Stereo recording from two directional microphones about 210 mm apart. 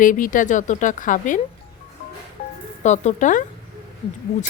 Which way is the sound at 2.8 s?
35° left (ahead or behind).